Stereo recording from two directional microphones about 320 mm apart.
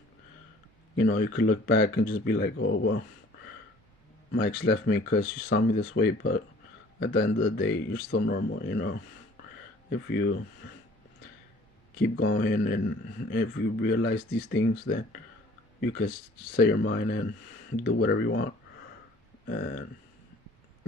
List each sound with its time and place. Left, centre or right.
0.9 s speech: left
4.3 s speech: left
12.1 s speech: left
16.6 s speech: left
19.5 s speech: left